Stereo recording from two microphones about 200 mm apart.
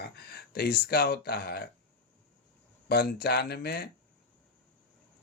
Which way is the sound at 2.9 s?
50° left (ahead or behind).